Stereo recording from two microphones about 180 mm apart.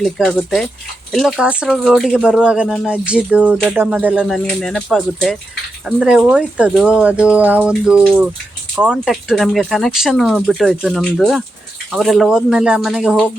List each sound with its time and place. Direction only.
0.0 s speech: centre (ahead or behind)